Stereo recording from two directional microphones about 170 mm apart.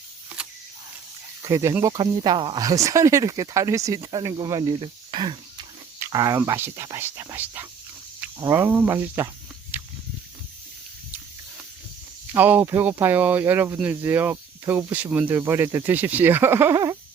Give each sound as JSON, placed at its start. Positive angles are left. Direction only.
{"t": 1.4, "sound": "speech", "side_deg": -20}
{"t": 9.7, "sound": "a sound", "side_deg": -10}
{"t": 12.3, "sound": "speech", "side_deg": -10}